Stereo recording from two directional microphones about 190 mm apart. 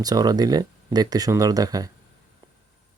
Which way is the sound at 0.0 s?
20° right (ahead or behind).